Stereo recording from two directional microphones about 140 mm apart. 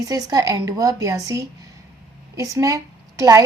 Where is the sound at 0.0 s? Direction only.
25° right (ahead or behind).